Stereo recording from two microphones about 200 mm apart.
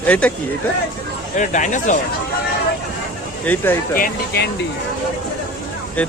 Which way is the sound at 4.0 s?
55° left (ahead or behind).